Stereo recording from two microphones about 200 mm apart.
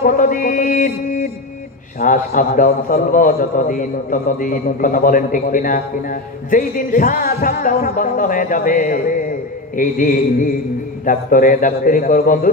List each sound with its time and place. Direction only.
0.0 s mantra: 45° left (ahead or behind)
2.0 s a man's voice: 45° left (ahead or behind)